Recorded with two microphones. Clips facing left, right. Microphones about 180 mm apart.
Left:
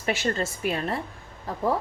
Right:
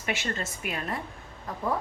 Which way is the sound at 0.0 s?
35° left (ahead or behind).